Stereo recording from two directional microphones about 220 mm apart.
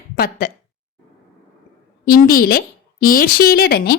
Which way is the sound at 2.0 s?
40° left (ahead or behind).